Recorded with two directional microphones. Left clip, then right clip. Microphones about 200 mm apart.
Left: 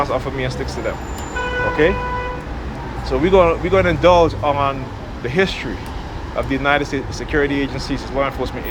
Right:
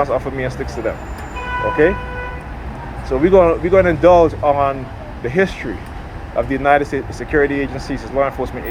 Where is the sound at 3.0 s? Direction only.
40° right (ahead or behind).